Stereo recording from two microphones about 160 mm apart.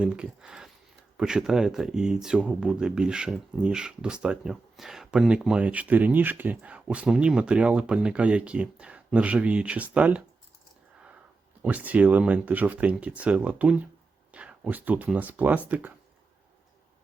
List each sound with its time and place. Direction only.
0.0 s speech: 5° right (ahead or behind)
11.6 s speech: 10° right (ahead or behind)